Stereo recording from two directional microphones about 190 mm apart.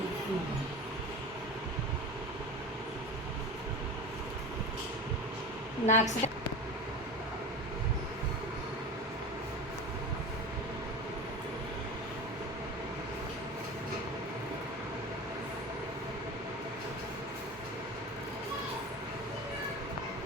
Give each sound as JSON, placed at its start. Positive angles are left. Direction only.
{"t": 5.8, "sound": "a woman's voice", "side_deg": 35}